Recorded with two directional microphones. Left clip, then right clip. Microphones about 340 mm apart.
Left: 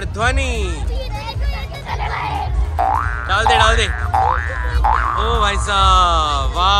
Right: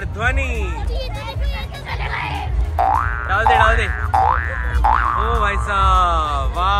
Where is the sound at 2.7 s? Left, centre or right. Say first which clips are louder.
Right 1 dB; centre.